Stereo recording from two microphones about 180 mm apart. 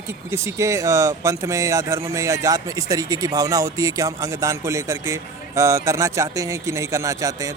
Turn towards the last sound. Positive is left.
turn(degrees=-20)  # may be behind; listen again after turning